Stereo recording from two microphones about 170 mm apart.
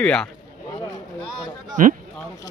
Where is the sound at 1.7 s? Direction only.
50° right (ahead or behind).